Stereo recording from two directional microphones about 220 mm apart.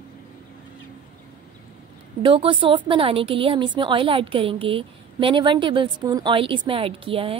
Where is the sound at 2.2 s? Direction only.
25° right (ahead or behind).